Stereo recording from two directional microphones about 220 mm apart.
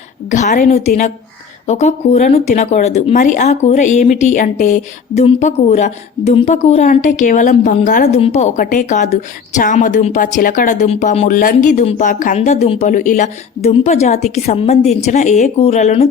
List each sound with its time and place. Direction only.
0.3 s speech: 35° left (ahead or behind)